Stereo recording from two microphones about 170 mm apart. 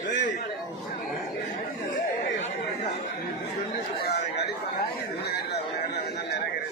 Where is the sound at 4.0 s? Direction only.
75° left (ahead or behind).